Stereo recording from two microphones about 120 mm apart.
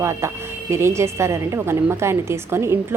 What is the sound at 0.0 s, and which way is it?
A woman's voice, 25° right (ahead or behind).